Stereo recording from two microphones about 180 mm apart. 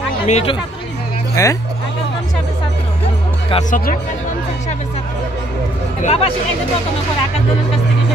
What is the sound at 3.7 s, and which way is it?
Speech, 50° left (ahead or behind).